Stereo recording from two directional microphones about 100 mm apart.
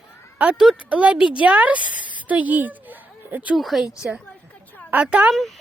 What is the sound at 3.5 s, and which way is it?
Speech, centre (ahead or behind).